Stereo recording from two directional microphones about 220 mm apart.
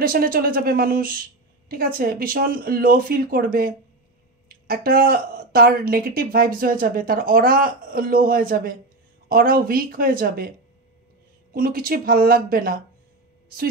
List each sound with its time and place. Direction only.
0.0 s speech: 40° right (ahead or behind)
11.5 s speech: 40° right (ahead or behind)